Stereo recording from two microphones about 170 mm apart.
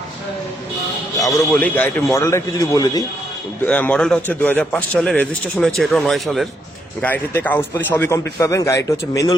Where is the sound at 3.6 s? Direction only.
10° left (ahead or behind).